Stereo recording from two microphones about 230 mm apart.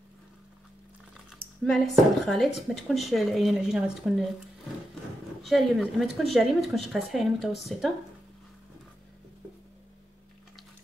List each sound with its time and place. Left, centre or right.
1.6 s speech: centre
5.5 s speech: centre